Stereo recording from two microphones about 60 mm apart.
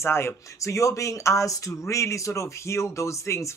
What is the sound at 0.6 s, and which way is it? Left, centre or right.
Speech, left.